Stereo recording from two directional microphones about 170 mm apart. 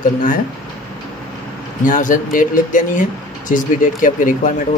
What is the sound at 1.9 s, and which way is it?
Speech, 50° left (ahead or behind).